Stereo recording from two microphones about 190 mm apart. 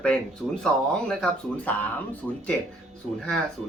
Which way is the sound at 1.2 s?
5° left (ahead or behind).